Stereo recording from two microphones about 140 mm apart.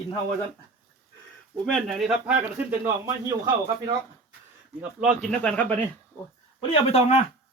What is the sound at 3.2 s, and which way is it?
Speech, 30° right (ahead or behind).